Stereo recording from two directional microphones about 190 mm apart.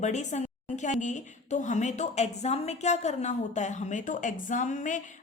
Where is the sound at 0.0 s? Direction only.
40° left (ahead or behind).